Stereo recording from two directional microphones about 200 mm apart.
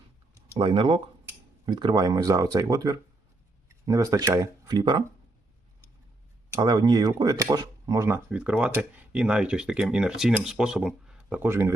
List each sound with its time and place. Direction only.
0.6 s speech: 25° right (ahead or behind)
6.5 s speech: 20° right (ahead or behind)